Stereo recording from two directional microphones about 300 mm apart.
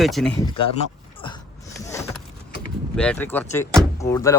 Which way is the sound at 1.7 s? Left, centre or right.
Centre.